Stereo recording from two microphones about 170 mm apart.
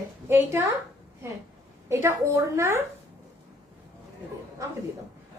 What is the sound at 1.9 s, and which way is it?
Speech, 15° right (ahead or behind).